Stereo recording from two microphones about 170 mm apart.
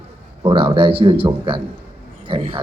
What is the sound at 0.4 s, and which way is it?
A man's voice, 30° right (ahead or behind).